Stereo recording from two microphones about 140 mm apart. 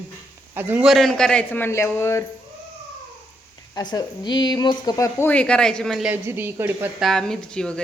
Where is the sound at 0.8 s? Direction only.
Centre (ahead or behind); by 2.2 s 20° left (ahead or behind).